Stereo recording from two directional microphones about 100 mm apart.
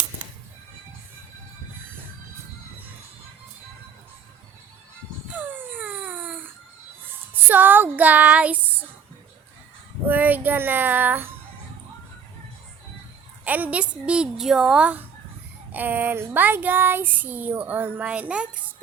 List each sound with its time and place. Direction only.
5.3 s a sound: 20° right (ahead or behind)
10.1 s child singing: 15° right (ahead or behind)
13.4 s speech: 15° right (ahead or behind)
15.7 s child singing: 20° right (ahead or behind)